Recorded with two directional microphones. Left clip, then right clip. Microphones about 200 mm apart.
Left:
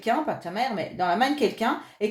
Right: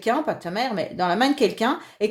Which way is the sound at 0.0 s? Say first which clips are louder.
Right 2 dB; 45° right (ahead or behind).